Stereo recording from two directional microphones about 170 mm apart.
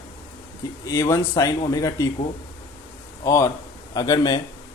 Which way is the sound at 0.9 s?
20° left (ahead or behind).